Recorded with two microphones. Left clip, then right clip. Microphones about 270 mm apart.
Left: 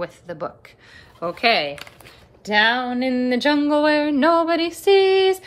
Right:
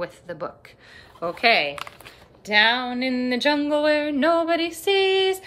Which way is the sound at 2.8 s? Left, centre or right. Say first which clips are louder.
Left 3 dB; left.